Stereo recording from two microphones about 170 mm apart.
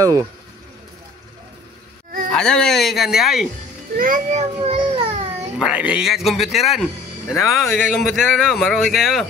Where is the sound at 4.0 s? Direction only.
45° right (ahead or behind).